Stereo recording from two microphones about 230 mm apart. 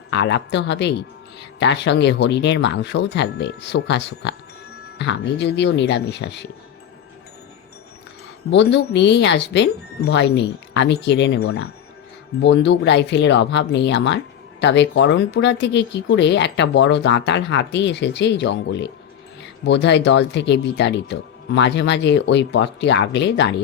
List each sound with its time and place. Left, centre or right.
0.1 s speech: left
8.4 s speech: left